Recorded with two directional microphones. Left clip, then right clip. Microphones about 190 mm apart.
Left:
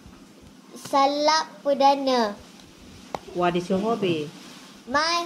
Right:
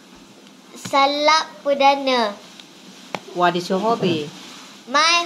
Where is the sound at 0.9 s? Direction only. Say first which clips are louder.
Right 4 dB; 15° left (ahead or behind).